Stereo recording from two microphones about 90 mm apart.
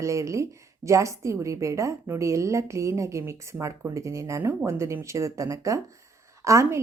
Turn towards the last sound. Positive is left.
turn(degrees=-35)  # may be behind; listen again after turning